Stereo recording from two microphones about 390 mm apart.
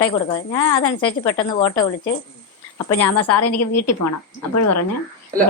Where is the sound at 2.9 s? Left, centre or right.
Left.